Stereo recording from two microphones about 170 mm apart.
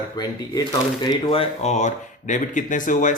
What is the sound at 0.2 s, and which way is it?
Speech, 25° left (ahead or behind).